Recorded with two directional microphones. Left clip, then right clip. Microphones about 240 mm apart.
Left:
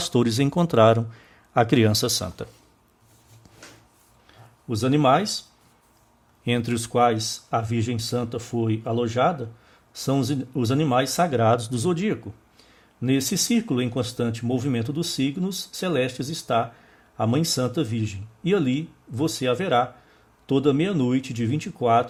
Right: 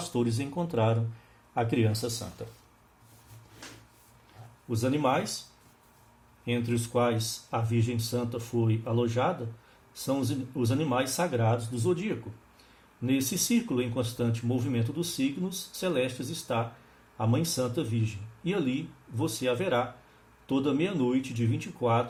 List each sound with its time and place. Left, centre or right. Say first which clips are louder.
0.0 s speech: left 9 dB; left
4.7 s speech: left 8 dB; left
6.4 s speech: left 6 dB; left